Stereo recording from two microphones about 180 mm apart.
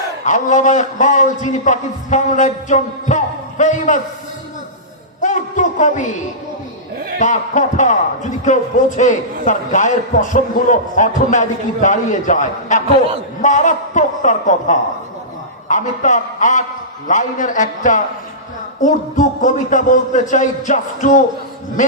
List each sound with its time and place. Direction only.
0.3 s a man's voice: 45° left (ahead or behind)
5.2 s a sound: 45° left (ahead or behind)
7.2 s a man's voice: 45° left (ahead or behind)